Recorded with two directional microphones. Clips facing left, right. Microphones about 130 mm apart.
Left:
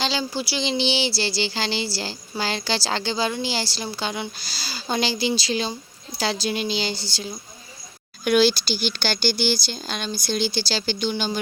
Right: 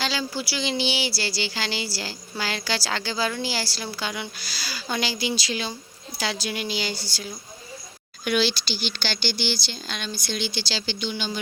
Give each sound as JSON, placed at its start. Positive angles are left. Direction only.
{"t": 0.0, "sound": "a woman's voice", "side_deg": 25}
{"t": 8.2, "sound": "speech", "side_deg": 45}